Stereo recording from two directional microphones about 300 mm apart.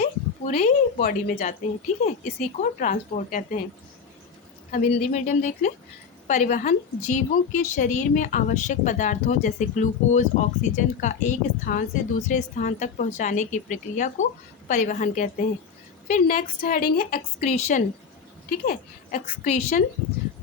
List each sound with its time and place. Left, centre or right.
0.0 s a woman's voice: left
4.7 s a woman's voice: left